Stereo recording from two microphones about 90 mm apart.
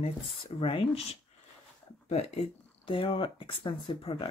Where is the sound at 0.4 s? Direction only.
90° left.